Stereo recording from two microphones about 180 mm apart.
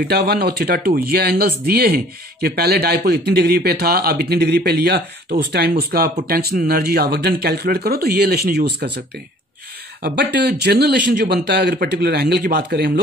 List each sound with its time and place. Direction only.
0.1 s speech: 60° right (ahead or behind)
10.0 s speech: 65° right (ahead or behind)